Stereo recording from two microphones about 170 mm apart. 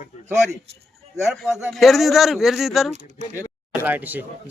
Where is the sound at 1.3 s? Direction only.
Centre (ahead or behind).